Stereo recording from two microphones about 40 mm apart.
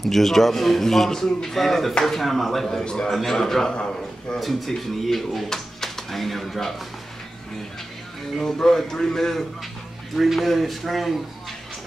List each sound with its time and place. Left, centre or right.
0.0 s speech: centre
2.8 s a man's voice: left
3.1 s a man's voice: centre; by 4.4 s left
4.4 s speech: centre
8.4 s a man's voice: centre
10.1 s speech: centre